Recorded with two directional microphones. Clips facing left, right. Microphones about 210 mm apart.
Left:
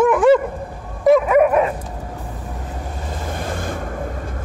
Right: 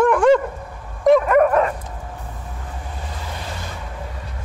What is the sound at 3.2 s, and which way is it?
Ocean, 50° left (ahead or behind).